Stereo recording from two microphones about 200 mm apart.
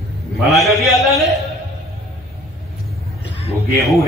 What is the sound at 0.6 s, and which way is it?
Speech, centre (ahead or behind).